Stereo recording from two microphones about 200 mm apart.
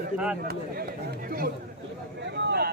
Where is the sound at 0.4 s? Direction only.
50° right (ahead or behind).